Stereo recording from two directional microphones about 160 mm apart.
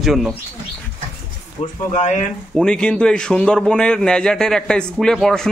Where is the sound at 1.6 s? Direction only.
45° left (ahead or behind).